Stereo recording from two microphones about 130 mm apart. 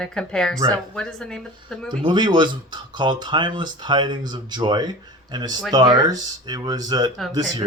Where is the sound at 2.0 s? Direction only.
35° right (ahead or behind).